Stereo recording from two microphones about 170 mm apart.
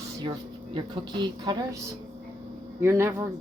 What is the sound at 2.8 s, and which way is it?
Speech, 15° right (ahead or behind).